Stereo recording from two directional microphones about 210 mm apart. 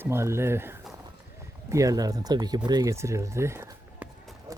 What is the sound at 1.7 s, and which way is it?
Speech, 15° right (ahead or behind).